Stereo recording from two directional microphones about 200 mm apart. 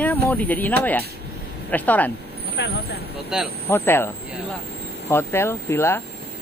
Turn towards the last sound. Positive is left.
turn(degrees=15)  # may be behind; listen again after turning